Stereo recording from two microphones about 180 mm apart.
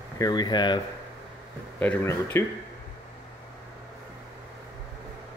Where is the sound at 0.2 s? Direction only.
25° left (ahead or behind).